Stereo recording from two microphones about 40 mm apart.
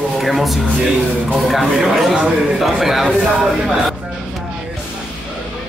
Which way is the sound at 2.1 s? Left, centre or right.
Centre.